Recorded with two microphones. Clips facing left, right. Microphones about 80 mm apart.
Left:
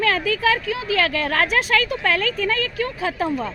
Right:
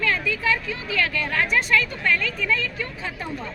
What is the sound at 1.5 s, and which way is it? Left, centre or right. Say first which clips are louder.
Speech: left 2 dB; left.